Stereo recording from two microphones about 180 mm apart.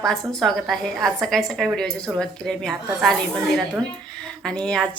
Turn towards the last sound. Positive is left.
turn(degrees=5)  # may be behind; listen again after turning